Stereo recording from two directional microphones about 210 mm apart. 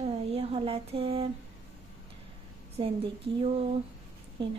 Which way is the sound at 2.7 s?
25° right (ahead or behind).